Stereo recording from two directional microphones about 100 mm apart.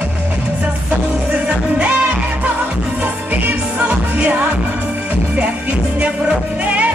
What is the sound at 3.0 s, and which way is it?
Music, 15° right (ahead or behind).